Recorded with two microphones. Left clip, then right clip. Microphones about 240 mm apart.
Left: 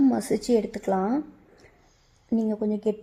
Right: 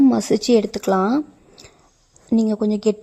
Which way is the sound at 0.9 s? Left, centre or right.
Right.